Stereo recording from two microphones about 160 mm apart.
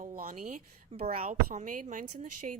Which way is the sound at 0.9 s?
40° right (ahead or behind).